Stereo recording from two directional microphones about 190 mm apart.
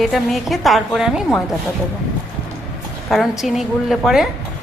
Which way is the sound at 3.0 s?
Centre (ahead or behind).